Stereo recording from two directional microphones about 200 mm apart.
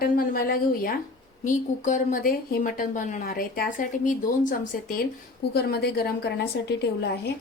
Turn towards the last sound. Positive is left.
turn(degrees=55)  # may be behind; listen again after turning